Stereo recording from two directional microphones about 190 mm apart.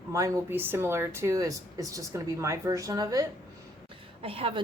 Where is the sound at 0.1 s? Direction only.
15° right (ahead or behind).